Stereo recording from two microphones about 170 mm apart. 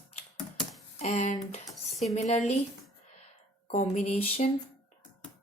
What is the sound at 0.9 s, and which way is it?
Speech, 40° left (ahead or behind).